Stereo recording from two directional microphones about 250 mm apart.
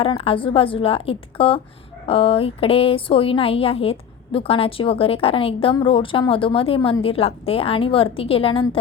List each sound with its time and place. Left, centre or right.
0.0 s a woman's voice: left